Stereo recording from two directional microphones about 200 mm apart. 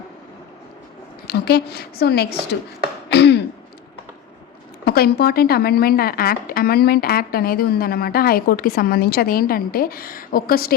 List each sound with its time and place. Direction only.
1.3 s a woman's voice: 50° left (ahead or behind)
3.1 s throat clearing: 55° left (ahead or behind)
4.9 s a woman's voice: 50° left (ahead or behind)